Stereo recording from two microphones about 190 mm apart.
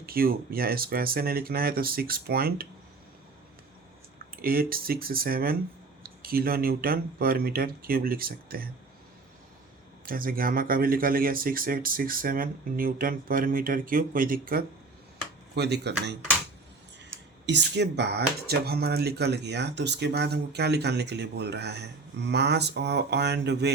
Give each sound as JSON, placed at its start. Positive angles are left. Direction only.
{"t": 0.0, "sound": "speech", "side_deg": -50}
{"t": 4.4, "sound": "speech", "side_deg": -50}
{"t": 10.1, "sound": "speech", "side_deg": -50}
{"t": 15.5, "sound": "speech", "side_deg": -60}
{"t": 17.4, "sound": "speech", "side_deg": -65}